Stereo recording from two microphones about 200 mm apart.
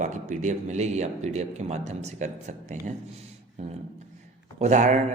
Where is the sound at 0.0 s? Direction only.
40° right (ahead or behind).